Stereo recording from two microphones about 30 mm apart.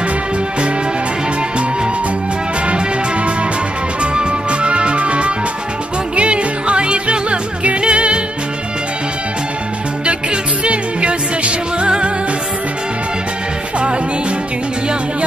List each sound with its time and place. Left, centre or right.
4.0 s music: right
10.0 s music: right